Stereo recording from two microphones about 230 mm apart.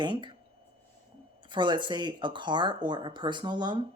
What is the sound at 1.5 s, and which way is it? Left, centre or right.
Speech, centre.